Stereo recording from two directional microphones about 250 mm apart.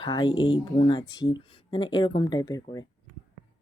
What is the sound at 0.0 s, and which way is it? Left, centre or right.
Speech, centre.